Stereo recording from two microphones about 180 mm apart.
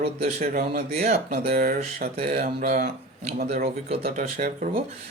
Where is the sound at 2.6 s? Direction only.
55° right (ahead or behind).